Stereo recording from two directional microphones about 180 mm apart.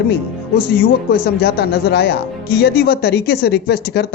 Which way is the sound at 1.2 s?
60° left (ahead or behind).